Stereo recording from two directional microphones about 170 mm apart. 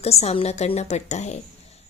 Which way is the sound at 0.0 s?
40° left (ahead or behind).